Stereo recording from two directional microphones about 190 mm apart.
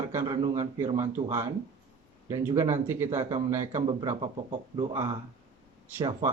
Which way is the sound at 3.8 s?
30° right (ahead or behind).